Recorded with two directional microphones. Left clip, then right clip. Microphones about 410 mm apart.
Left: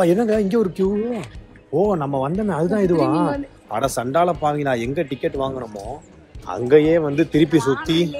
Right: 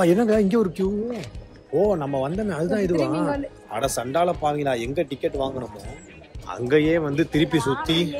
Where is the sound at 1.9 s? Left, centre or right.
Centre.